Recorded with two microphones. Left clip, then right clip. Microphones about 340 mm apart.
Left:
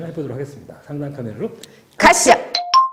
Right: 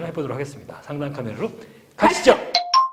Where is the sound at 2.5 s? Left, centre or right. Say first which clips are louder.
Left 3 dB; centre.